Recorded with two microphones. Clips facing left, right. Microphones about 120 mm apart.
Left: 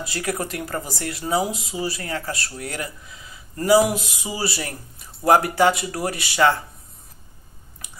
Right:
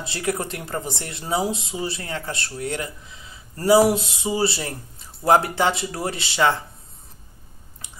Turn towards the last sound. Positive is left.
turn(degrees=-20)  # may be behind; listen again after turning